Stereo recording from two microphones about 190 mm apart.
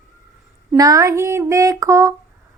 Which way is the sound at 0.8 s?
20° right (ahead or behind).